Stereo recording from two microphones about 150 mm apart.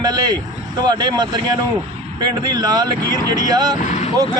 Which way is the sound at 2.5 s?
30° right (ahead or behind).